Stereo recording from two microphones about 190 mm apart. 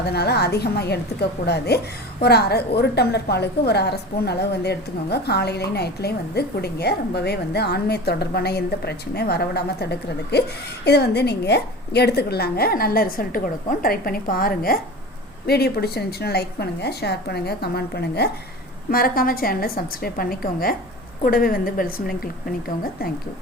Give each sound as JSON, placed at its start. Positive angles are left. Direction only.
{"t": 0.0, "sound": "a woman's voice", "side_deg": 60}